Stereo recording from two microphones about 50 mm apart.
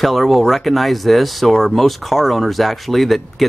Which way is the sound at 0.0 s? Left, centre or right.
Centre.